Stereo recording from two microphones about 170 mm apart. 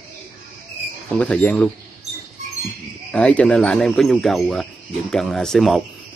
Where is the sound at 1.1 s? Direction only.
10° left (ahead or behind).